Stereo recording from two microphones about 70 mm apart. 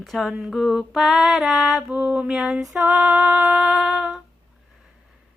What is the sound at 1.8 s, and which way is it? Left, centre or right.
Female singing, centre.